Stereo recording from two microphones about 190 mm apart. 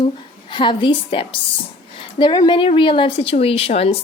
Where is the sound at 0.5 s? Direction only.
25° left (ahead or behind).